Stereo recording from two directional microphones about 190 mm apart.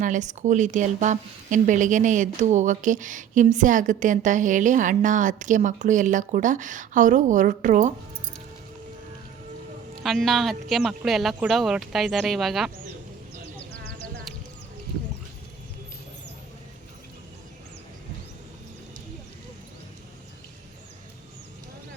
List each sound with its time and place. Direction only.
0.0 s a woman's voice: 40° right (ahead or behind)
10.0 s speech: centre (ahead or behind)